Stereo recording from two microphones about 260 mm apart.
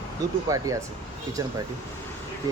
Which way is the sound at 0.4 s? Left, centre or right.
Centre.